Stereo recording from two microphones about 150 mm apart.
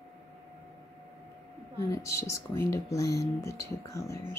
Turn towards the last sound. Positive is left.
turn(degrees=20)  # may be behind; listen again after turning